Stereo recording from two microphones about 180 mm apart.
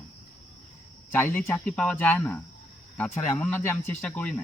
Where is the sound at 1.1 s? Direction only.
10° left (ahead or behind).